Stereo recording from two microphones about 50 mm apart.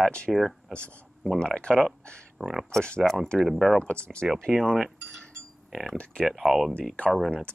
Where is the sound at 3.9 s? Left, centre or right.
Centre.